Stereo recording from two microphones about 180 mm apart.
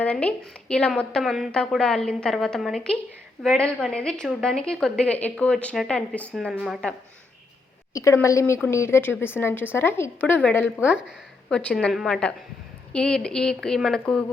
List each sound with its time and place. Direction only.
0.0 s a woman's voice: 10° left (ahead or behind)
7.9 s a woman's voice: 15° left (ahead or behind)
10.8 s a woman's voice: 5° right (ahead or behind)